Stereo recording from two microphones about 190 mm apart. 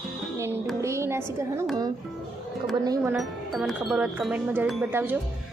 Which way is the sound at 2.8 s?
20° right (ahead or behind).